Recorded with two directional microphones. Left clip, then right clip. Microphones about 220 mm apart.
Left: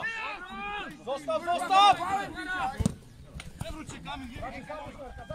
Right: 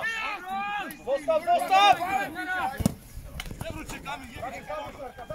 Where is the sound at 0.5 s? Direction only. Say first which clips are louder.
Right 6 dB; 30° left (ahead or behind).